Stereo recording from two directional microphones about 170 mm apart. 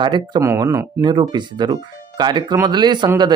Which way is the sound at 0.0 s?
25° right (ahead or behind).